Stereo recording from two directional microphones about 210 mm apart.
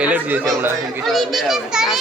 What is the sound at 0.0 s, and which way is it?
A child's voice, 5° right (ahead or behind).